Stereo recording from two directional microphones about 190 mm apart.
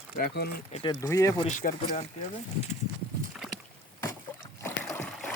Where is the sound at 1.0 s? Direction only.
15° left (ahead or behind).